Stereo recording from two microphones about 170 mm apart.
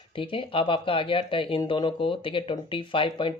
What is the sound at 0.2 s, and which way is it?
Speech, 30° left (ahead or behind).